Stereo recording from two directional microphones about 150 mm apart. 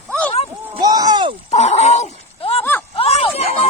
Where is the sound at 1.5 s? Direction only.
50° left (ahead or behind).